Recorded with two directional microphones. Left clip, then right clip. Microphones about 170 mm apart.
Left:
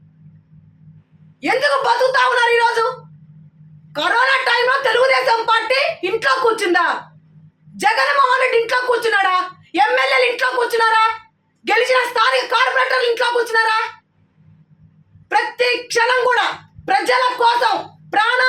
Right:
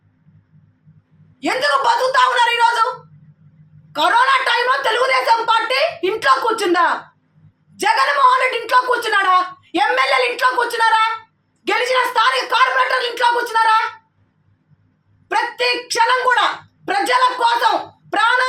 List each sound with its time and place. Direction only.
1.4 s a woman's voice: 5° left (ahead or behind)
3.9 s a woman's voice: 5° left (ahead or behind)
15.3 s a woman's voice: 5° left (ahead or behind)